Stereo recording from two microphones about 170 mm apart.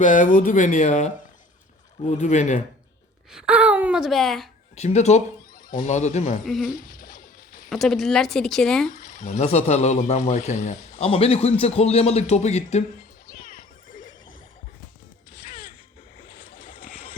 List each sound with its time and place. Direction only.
0.0 s speech: 50° left (ahead or behind)
3.3 s speech: 5° right (ahead or behind)
4.7 s a man's voice: 40° left (ahead or behind)
6.7 s a sound: 55° left (ahead or behind)
7.7 s speech: centre (ahead or behind)
9.0 s a man's voice: 45° left (ahead or behind)
13.4 s music: 50° left (ahead or behind)
16.3 s boat: 50° left (ahead or behind)